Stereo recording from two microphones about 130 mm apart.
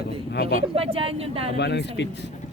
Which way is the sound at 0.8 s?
45° right (ahead or behind).